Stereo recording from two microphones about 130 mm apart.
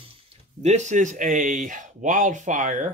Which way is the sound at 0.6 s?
60° right (ahead or behind).